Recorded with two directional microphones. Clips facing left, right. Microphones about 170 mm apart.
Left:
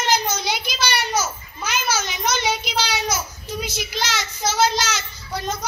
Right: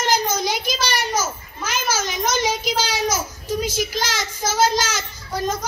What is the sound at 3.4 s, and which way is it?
Child singing, 45° right (ahead or behind).